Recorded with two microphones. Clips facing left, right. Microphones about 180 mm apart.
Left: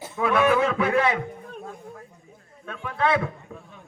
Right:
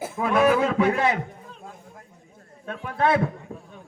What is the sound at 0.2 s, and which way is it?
Speech, 40° right (ahead or behind).